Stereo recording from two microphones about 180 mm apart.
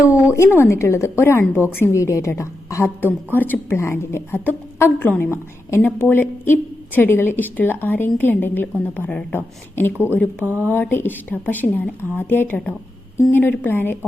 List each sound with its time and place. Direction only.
0.1 s a woman's voice: 15° left (ahead or behind)
10.4 s speech: 10° right (ahead or behind)
10.7 s a woman's voice: 10° left (ahead or behind)